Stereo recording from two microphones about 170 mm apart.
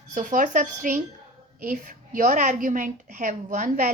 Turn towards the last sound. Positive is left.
turn(degrees=-50)  # may be behind; listen again after turning